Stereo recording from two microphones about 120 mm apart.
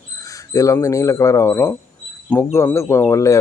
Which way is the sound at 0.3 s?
25° left (ahead or behind).